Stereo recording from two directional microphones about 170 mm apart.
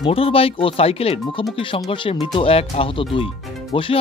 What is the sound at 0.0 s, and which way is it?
Speech, 35° left (ahead or behind).